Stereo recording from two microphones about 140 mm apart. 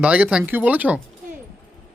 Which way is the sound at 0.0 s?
10° right (ahead or behind).